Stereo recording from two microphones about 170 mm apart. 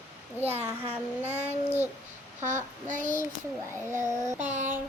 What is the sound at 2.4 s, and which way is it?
Child singing, 45° right (ahead or behind).